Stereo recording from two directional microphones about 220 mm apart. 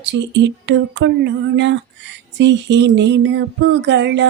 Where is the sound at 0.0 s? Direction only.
55° right (ahead or behind).